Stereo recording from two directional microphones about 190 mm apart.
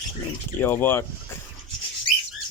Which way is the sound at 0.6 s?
10° left (ahead or behind).